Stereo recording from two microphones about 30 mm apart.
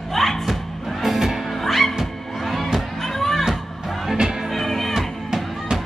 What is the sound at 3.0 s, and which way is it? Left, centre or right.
Music, centre.